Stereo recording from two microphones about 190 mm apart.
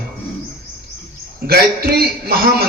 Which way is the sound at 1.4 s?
55° right (ahead or behind).